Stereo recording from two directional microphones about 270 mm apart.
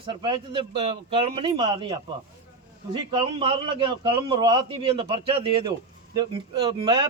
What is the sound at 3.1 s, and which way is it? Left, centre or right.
A man's voice, centre.